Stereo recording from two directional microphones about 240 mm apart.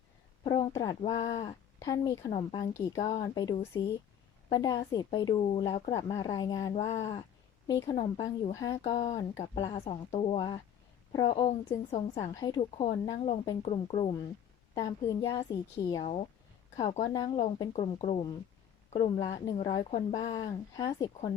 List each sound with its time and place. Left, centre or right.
0.4 s a woman's voice: centre
1.2 s speech: left
1.8 s a woman's voice: centre
3.1 s a woman's voice: left
6.8 s a woman's voice: left
8.8 s a woman's voice: left
16.0 s a woman's voice: left